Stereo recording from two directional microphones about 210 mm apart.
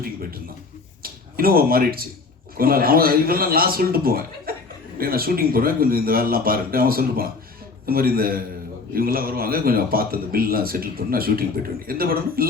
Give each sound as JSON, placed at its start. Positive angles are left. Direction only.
{"t": 0.0, "sound": "a man's voice", "side_deg": -45}